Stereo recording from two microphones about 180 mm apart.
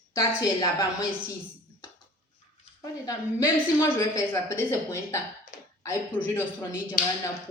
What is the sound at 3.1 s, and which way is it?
A woman's voice, 15° left (ahead or behind).